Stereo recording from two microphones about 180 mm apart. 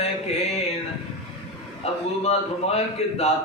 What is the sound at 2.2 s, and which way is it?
Mantra, 35° left (ahead or behind).